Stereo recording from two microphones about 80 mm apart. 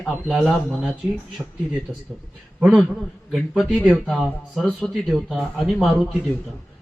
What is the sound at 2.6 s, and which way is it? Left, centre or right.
Speech, centre.